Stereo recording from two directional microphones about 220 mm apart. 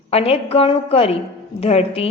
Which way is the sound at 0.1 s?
30° left (ahead or behind).